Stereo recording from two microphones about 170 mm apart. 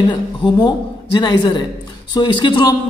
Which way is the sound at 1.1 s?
25° left (ahead or behind).